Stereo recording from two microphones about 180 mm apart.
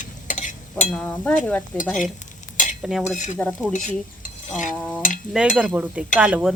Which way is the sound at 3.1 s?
45° left (ahead or behind).